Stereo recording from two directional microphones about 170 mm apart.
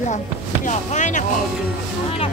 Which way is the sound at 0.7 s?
45° left (ahead or behind).